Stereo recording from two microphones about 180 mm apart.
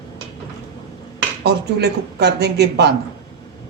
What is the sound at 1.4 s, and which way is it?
Speech, 65° right (ahead or behind).